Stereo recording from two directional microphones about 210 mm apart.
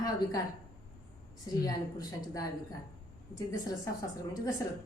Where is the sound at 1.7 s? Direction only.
15° left (ahead or behind).